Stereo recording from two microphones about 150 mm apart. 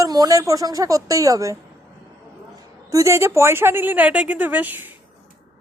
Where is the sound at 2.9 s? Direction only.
20° right (ahead or behind).